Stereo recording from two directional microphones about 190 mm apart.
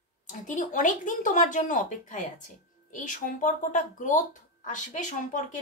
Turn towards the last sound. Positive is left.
turn(degrees=40)  # may be behind; listen again after turning